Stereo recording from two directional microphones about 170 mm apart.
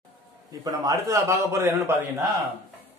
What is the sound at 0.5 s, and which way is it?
A man's voice, 20° right (ahead or behind).